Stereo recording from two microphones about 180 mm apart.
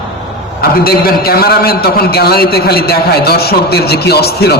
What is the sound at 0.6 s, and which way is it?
A man's voice, 55° left (ahead or behind).